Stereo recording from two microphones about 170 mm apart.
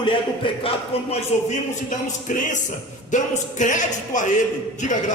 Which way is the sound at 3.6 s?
45° left (ahead or behind).